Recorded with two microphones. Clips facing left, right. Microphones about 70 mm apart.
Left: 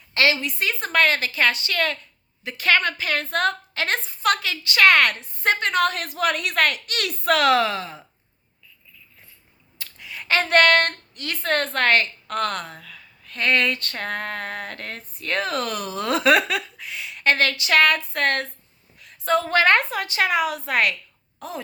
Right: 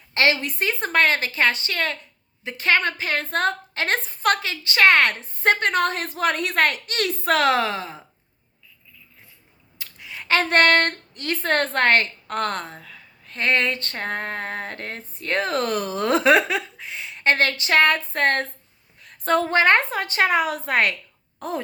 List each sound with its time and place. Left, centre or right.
0.1 s a woman's voice: right
4.4 s a woman's voice: right
10.0 s a woman's voice: right
18.9 s a sound: right
19.5 s a woman's voice: right